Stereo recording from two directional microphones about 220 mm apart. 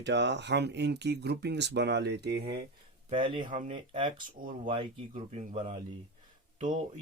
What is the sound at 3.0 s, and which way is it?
Speech, 20° right (ahead or behind).